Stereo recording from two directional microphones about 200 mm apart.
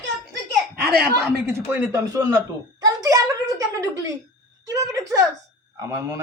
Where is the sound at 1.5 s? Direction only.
10° right (ahead or behind).